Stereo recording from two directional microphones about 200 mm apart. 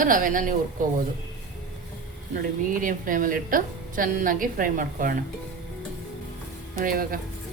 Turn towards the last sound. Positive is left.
turn(degrees=-45)  # may be behind; listen again after turning